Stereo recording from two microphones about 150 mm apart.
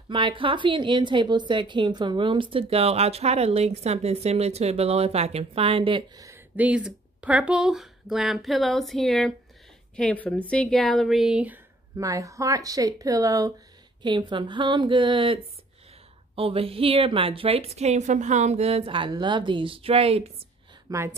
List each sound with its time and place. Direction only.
0.1 s a woman's voice: 35° right (ahead or behind)
6.2 s speech: 15° right (ahead or behind)
12.0 s a woman's voice: 20° right (ahead or behind); by 20.2 s 40° right (ahead or behind)
20.9 s speech: 25° right (ahead or behind)